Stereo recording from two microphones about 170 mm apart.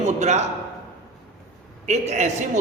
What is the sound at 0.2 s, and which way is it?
Speech, 40° right (ahead or behind).